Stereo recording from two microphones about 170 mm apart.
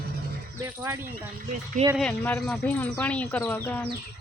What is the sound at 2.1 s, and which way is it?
Speech, 10° left (ahead or behind).